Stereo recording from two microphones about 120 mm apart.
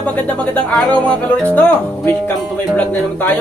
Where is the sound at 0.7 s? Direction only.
10° left (ahead or behind).